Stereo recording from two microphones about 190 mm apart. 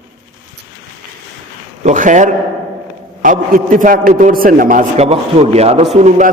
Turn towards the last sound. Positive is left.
turn(degrees=-35)  # may be behind; listen again after turning